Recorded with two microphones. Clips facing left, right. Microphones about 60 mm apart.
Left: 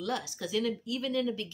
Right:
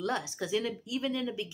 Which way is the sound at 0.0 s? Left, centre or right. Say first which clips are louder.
Right 1 dB; right.